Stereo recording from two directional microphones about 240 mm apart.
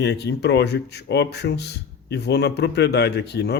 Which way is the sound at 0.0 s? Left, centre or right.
Left.